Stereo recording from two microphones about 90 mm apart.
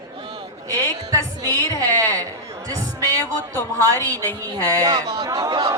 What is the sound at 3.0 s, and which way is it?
A woman's voice, 20° left (ahead or behind).